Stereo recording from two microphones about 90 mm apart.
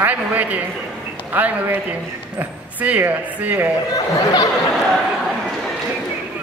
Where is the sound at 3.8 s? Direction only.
45° left (ahead or behind).